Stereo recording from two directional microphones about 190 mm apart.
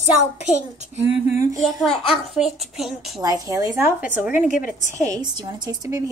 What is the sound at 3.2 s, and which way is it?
A woman's voice, 20° right (ahead or behind).